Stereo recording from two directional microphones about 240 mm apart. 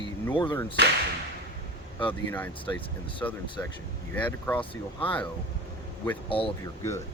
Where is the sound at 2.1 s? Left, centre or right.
Centre.